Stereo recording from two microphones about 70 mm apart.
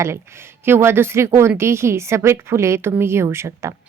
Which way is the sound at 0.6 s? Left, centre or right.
Right.